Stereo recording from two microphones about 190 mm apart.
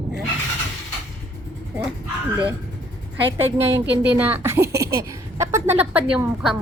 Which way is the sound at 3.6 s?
15° right (ahead or behind).